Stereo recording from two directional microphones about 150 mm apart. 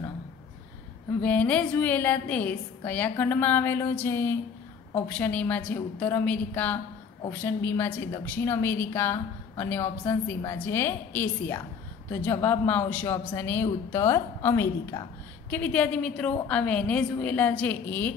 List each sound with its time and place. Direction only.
1.2 s a woman's voice: 10° left (ahead or behind)
15.5 s a woman's voice: 10° left (ahead or behind)